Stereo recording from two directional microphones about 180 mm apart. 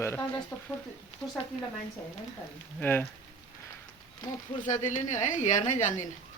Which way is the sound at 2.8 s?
10° left (ahead or behind).